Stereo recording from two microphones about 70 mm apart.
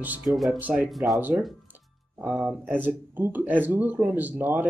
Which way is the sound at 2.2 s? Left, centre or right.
Right.